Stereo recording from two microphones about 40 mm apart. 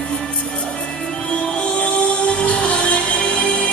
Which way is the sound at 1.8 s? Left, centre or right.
Left.